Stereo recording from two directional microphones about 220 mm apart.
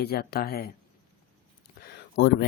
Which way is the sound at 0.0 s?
45° left (ahead or behind).